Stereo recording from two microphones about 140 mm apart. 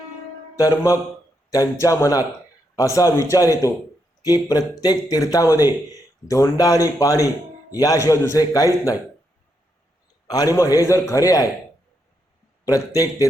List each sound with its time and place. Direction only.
0.5 s a man's voice: 25° left (ahead or behind)
10.2 s a man's voice: 25° left (ahead or behind)
12.6 s a man's voice: 25° left (ahead or behind)